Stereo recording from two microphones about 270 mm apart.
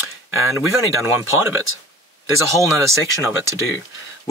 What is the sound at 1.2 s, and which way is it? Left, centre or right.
Speech, left.